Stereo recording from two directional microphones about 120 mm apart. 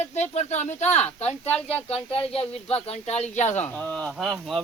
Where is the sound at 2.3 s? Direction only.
55° left (ahead or behind).